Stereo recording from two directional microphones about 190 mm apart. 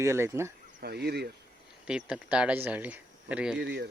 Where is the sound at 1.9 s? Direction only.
5° right (ahead or behind).